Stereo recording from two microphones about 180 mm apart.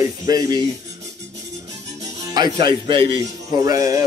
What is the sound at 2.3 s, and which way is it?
Speech, 25° right (ahead or behind).